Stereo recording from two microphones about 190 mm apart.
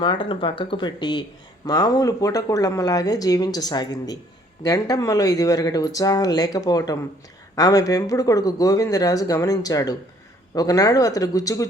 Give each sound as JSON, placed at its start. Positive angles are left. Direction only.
{"t": 0.0, "sound": "speech", "side_deg": 25}